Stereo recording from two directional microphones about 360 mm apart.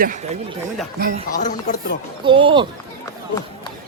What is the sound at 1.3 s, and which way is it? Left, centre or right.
Speech, left.